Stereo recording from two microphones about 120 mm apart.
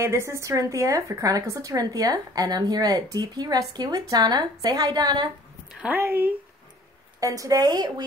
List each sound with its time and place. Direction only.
0.0 s speech: 25° right (ahead or behind)
5.7 s a sound: 5° right (ahead or behind)
5.9 s speech: 20° right (ahead or behind); by 7.9 s 35° right (ahead or behind)